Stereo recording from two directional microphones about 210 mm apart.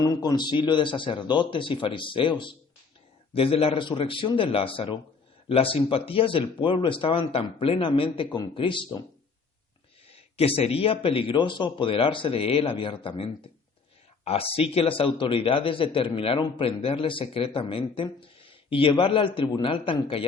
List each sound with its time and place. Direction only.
0.0 s a man's voice: 20° left (ahead or behind)
3.3 s a man's voice: 25° left (ahead or behind)
10.1 s a man's voice: 30° left (ahead or behind)